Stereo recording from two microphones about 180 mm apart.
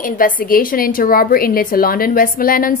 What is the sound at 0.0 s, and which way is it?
A woman's voice, 50° left (ahead or behind).